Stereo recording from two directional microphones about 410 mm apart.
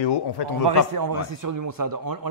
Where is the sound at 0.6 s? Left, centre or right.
Right.